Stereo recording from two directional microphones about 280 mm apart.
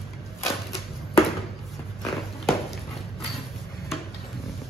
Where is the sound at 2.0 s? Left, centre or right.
Centre.